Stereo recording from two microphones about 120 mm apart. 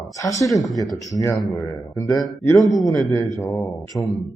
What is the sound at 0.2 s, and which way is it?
Speech, 25° left (ahead or behind).